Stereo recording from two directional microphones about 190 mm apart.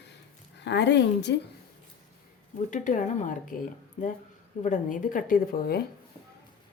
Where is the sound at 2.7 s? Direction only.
40° left (ahead or behind).